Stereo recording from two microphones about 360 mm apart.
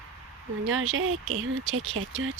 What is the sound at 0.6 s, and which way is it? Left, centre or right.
Speech, right.